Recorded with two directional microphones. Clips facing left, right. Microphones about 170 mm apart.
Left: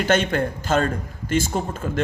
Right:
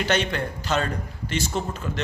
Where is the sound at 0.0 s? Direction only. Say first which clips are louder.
Left 4 dB; 50° left (ahead or behind).